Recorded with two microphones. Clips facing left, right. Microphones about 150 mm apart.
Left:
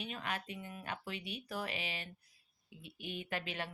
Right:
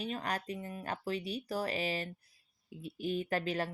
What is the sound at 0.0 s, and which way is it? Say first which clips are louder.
Speech: right 5 dB; 40° right (ahead or behind).